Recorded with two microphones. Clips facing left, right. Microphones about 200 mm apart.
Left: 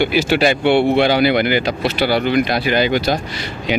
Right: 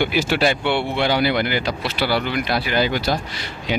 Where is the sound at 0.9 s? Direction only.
80° left.